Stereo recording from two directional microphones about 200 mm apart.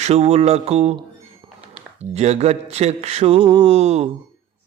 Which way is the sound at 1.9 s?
35° right (ahead or behind).